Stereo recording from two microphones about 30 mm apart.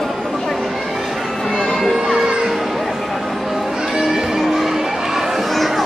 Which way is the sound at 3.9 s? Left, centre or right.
Centre.